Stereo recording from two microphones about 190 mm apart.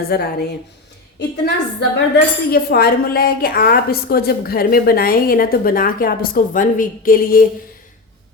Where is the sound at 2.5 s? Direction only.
55° left (ahead or behind).